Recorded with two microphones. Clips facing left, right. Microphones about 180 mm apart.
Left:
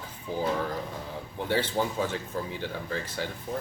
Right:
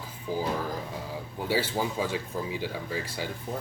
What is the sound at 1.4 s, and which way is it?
Speech, 10° right (ahead or behind).